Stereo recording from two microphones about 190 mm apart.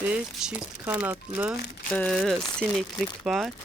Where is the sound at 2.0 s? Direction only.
5° left (ahead or behind).